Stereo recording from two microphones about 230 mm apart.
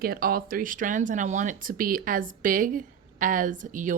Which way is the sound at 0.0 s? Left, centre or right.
Right.